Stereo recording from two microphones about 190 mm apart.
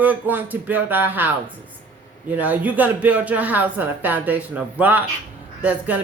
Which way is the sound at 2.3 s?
10° right (ahead or behind).